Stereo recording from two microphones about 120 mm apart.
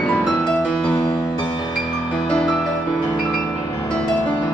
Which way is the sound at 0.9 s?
35° left (ahead or behind).